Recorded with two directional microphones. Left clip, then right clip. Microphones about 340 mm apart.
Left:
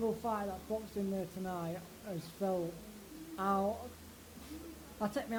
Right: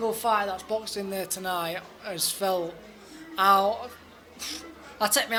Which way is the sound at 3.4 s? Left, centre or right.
Centre.